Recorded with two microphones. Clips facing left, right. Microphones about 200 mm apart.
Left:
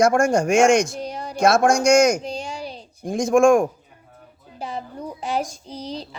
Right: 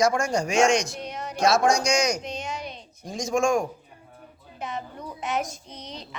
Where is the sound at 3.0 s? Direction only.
55° left (ahead or behind).